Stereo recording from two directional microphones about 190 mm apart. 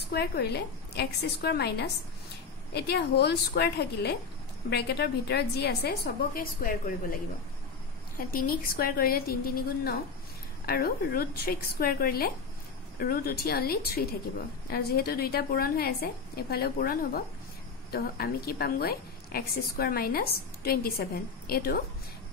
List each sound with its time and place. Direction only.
0.1 s a woman's voice: 60° left (ahead or behind)
8.2 s a woman's voice: 50° left (ahead or behind)
10.6 s a woman's voice: 50° left (ahead or behind)